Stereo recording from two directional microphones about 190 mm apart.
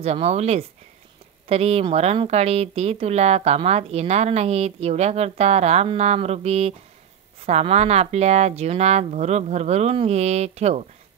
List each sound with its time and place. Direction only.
0.0 s speech: 35° right (ahead or behind)